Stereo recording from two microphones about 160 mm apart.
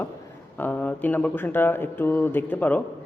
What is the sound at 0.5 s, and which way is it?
Speech, 10° left (ahead or behind).